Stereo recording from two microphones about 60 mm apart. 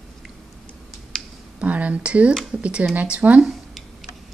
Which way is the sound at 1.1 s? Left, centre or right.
Centre.